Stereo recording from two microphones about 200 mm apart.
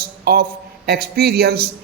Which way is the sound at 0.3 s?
50° right (ahead or behind).